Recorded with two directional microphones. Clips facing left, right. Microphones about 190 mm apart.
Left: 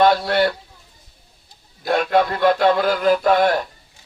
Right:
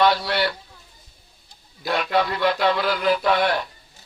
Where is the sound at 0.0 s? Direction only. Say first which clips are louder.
Left 4 dB; 50° left (ahead or behind).